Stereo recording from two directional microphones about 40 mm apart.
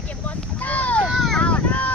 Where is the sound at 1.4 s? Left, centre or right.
Left.